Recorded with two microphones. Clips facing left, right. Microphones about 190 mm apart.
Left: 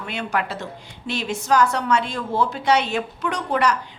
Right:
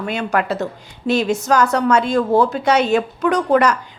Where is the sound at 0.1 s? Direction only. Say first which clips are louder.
Right 5 dB; 45° right (ahead or behind).